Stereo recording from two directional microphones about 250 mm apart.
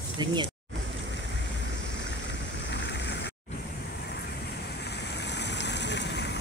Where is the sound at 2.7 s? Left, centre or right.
Left.